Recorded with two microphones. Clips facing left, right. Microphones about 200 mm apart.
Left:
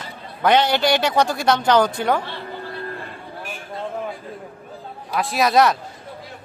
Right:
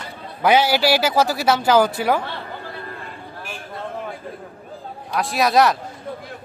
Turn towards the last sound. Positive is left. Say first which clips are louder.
# even
turn(degrees=0)  # may be behind; listen again after turning